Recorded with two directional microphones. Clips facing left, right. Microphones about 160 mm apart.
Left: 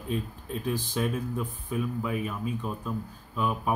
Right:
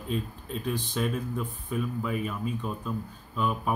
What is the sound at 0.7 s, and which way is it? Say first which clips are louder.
Speech: left 1 dB; 5° left (ahead or behind).